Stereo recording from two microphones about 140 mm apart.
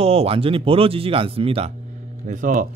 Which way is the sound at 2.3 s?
65° right (ahead or behind).